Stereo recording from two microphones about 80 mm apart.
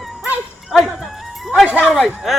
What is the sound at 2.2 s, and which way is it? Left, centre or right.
Speech, centre.